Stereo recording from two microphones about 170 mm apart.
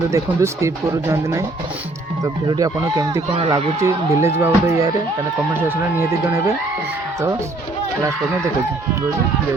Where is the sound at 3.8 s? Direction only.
15° right (ahead or behind).